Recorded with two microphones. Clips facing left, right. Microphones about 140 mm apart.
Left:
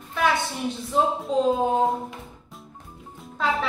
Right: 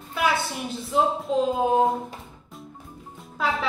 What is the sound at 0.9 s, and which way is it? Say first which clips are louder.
Speech: even; 5° right (ahead or behind).